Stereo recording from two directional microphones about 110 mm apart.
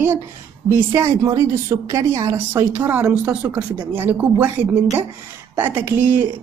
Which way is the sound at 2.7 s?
15° right (ahead or behind).